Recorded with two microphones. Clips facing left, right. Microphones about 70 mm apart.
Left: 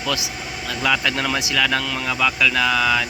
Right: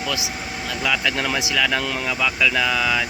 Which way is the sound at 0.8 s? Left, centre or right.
Centre.